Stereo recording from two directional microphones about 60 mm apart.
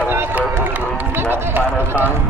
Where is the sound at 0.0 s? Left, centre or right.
Right.